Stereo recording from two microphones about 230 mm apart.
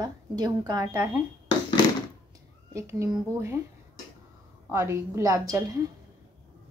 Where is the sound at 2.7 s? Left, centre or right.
Centre.